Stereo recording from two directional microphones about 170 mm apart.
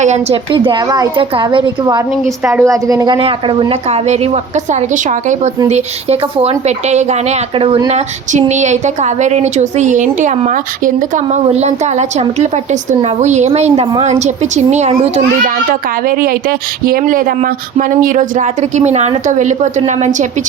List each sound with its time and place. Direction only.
0.0 s speech: 45° right (ahead or behind)
0.5 s a woman's voice: 30° right (ahead or behind)
5.6 s a woman's voice: 40° right (ahead or behind)
16.0 s speech: 60° right (ahead or behind)